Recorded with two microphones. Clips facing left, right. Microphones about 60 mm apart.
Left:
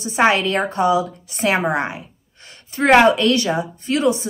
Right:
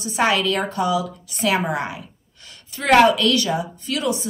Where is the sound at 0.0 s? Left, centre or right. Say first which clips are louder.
Left 3 dB; left.